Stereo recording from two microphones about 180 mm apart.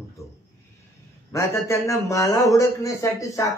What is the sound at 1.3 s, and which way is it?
Speech, 15° left (ahead or behind).